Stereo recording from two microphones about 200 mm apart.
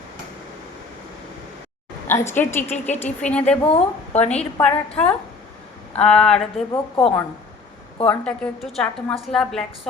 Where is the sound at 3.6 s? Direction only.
30° left (ahead or behind).